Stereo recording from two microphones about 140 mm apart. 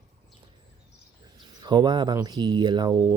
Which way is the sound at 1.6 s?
30° right (ahead or behind).